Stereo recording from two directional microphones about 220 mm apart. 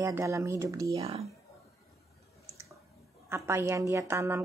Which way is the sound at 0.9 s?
25° right (ahead or behind).